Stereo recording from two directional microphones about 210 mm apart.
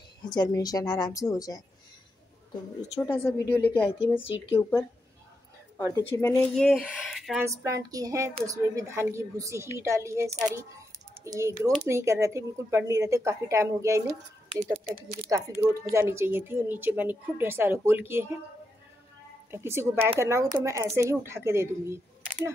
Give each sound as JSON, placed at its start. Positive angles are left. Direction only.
{"t": 0.2, "sound": "a woman's voice", "side_deg": 20}
{"t": 3.1, "sound": "a woman's voice", "side_deg": 10}
{"t": 4.2, "sound": "speech", "side_deg": 25}
{"t": 4.6, "sound": "a woman's voice", "side_deg": 10}
{"t": 6.5, "sound": "speech", "side_deg": 0}
{"t": 7.4, "sound": "speech", "side_deg": -15}
{"t": 19.5, "sound": "speech", "side_deg": -10}